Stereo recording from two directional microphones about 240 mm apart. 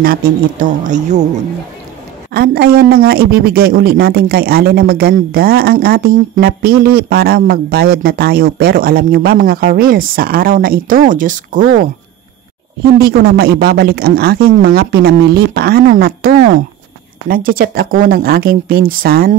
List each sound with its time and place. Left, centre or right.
0.0 s speech: right
2.3 s speech: right
13.0 s speech: right